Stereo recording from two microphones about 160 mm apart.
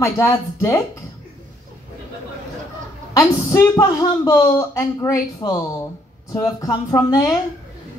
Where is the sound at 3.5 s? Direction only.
20° left (ahead or behind).